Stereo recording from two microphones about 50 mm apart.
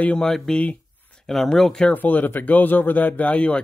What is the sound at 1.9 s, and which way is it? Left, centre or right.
Speech, left.